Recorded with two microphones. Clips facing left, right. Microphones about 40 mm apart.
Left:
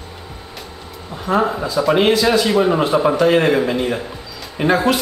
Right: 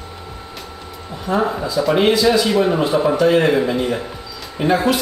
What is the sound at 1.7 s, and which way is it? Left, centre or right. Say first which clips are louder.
Speech: left 1 dB; centre.